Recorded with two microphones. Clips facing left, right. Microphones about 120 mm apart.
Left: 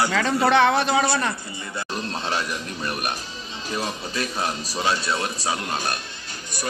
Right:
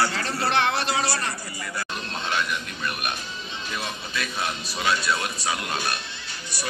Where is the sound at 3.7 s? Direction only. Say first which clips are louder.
Left 5 dB; 35° left (ahead or behind).